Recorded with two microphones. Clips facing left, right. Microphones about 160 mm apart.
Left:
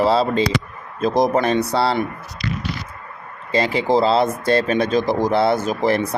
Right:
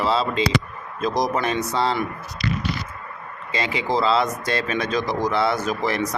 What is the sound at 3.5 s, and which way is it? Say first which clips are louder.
Speech: left 6 dB; 40° left (ahead or behind).